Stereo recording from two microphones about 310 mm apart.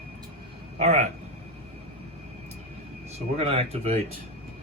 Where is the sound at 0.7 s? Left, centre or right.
Right.